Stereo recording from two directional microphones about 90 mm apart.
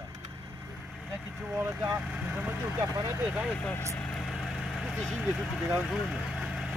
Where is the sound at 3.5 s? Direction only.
15° left (ahead or behind).